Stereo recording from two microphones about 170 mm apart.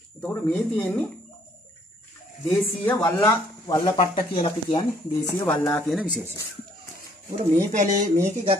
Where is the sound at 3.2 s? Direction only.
25° left (ahead or behind).